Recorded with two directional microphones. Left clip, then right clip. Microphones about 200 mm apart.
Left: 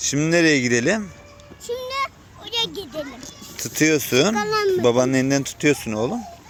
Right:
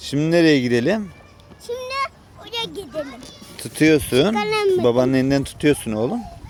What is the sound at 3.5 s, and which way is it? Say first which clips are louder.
Speech: right 3 dB; 10° right (ahead or behind).